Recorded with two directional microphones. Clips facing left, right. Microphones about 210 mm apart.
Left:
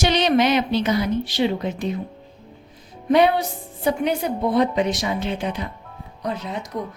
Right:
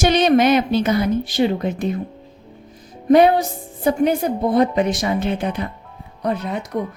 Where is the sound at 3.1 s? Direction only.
45° right (ahead or behind).